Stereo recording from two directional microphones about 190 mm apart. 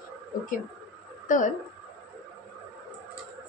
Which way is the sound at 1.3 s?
45° left (ahead or behind).